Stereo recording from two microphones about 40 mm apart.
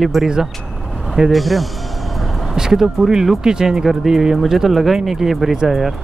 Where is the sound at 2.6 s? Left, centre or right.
Centre.